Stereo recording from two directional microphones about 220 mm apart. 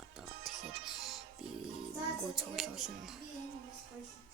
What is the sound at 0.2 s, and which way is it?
Music, centre (ahead or behind).